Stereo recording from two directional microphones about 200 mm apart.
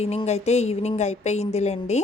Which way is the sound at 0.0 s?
30° left (ahead or behind).